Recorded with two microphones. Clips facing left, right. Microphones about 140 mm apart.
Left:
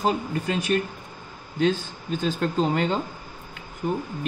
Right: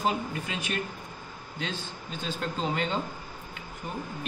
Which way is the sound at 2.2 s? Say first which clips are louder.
Left 7 dB; 45° left (ahead or behind).